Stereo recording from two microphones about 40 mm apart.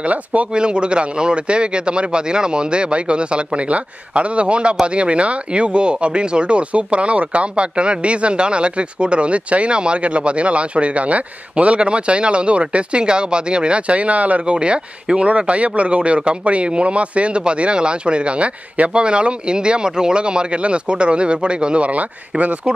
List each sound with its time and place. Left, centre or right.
0.0 s speech: right
0.5 s speech: right
14.4 s speech: right